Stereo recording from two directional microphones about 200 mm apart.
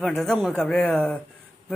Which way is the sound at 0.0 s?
Centre (ahead or behind).